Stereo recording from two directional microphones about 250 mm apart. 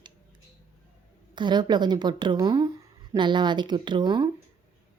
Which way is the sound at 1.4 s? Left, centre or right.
Centre.